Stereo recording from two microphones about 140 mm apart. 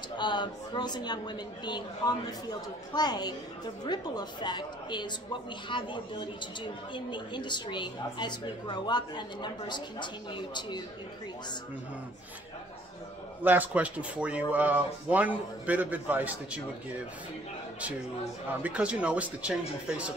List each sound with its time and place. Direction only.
0.2 s a woman's voice: 30° left (ahead or behind)
13.4 s speech: 10° right (ahead or behind)
18.5 s speech: 10° right (ahead or behind)